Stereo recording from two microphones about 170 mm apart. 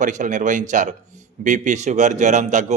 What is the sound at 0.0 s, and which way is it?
Speech, 45° right (ahead or behind).